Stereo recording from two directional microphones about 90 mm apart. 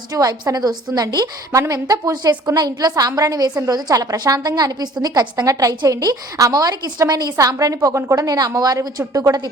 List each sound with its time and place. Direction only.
0.1 s a woman's voice: 40° right (ahead or behind)